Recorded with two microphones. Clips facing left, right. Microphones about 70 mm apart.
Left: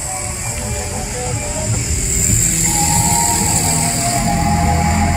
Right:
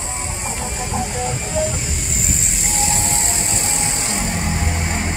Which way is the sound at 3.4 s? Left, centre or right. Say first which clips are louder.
Left 5 dB; centre.